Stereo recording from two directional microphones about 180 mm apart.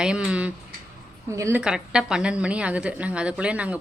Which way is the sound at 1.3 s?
15° right (ahead or behind).